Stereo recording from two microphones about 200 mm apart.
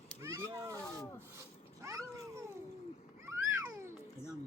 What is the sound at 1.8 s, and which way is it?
Cat, 15° right (ahead or behind).